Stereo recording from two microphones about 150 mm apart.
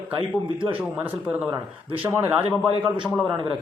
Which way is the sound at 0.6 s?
10° right (ahead or behind).